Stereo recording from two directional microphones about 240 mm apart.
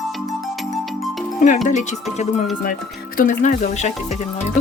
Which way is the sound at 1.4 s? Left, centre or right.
Left.